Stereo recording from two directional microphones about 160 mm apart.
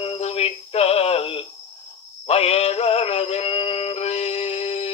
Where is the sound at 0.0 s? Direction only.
40° left (ahead or behind).